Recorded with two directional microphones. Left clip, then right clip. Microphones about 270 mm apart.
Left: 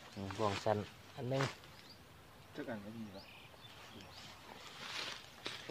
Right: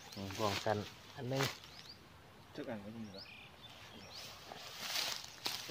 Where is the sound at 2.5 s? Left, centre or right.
Centre.